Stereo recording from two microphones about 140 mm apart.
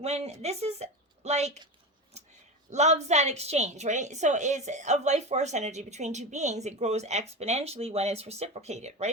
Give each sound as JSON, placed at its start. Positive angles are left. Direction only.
{"t": 0.0, "sound": "a woman's voice", "side_deg": -50}
{"t": 2.6, "sound": "a woman's voice", "side_deg": -55}